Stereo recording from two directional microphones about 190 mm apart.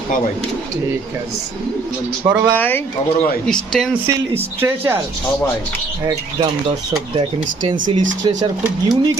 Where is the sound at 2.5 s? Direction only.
10° left (ahead or behind).